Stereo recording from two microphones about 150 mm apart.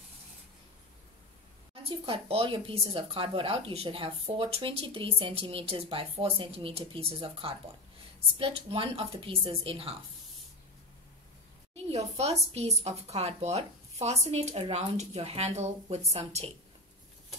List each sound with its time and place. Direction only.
1.8 s speech: 35° right (ahead or behind)
11.7 s speech: 45° right (ahead or behind)